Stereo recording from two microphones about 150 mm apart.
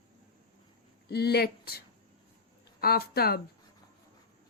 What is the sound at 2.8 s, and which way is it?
Speech, 90° left.